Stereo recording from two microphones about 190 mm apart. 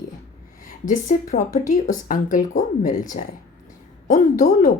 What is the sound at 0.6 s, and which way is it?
A woman's voice, 45° left (ahead or behind).